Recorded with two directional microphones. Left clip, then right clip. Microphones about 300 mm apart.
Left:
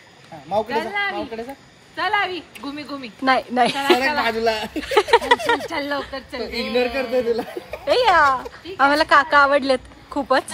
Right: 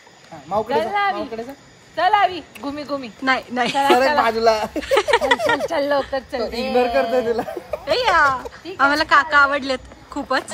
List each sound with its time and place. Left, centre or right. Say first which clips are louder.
0.7 s speech: right 4 dB; right
3.3 s speech: left 2 dB; centre
5.7 s a woman's voice: right 6 dB; right
7.3 s speech: right 3 dB; centre